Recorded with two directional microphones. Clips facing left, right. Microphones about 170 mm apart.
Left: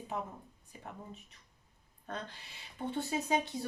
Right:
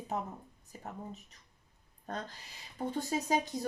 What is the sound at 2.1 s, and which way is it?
Speech, 40° right (ahead or behind).